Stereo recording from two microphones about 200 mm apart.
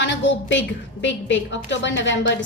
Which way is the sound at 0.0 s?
65° left (ahead or behind).